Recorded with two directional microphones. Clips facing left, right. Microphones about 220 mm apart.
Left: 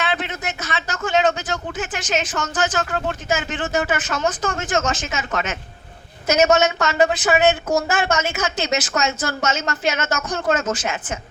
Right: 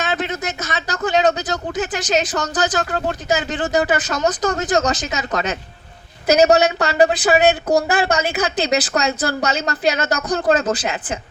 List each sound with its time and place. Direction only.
0.0 s a man's voice: 40° right (ahead or behind)